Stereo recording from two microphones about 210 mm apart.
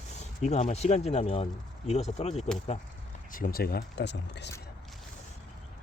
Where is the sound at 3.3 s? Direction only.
45° left (ahead or behind).